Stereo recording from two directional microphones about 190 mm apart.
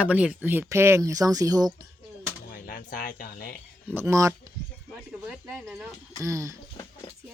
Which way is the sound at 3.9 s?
15° right (ahead or behind).